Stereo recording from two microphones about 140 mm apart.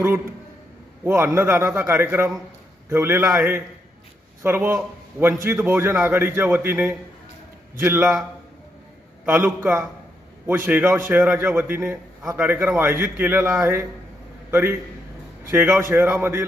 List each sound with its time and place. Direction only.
0.0 s a man's voice: 15° right (ahead or behind)
9.2 s a man's voice: 15° right (ahead or behind)